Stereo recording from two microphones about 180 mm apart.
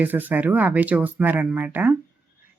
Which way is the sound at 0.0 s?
10° right (ahead or behind).